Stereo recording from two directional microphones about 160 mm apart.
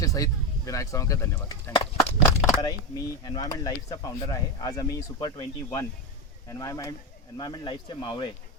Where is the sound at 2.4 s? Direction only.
Centre (ahead or behind).